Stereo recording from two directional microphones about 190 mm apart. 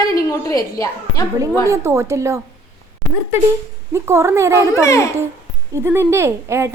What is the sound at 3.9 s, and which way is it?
A woman's voice, 15° right (ahead or behind).